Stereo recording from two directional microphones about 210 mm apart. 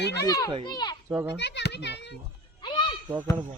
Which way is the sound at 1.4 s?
55° left (ahead or behind).